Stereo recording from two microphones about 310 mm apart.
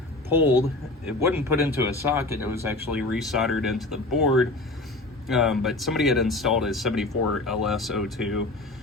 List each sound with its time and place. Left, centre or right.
0.3 s a man's voice: centre